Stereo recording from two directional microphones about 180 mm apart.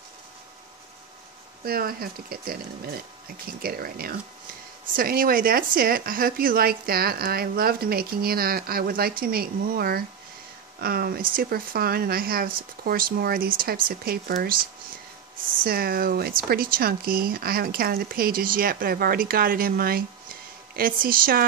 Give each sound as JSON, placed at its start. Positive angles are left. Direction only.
{"t": 1.6, "sound": "speech", "side_deg": -55}
{"t": 15.6, "sound": "speech", "side_deg": -55}